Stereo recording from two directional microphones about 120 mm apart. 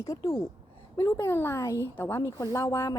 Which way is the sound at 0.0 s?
20° left (ahead or behind).